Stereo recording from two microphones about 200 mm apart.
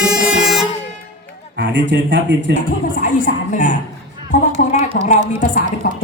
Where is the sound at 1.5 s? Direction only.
60° right (ahead or behind).